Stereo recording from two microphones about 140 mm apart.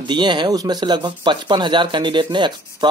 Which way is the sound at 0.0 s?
35° right (ahead or behind).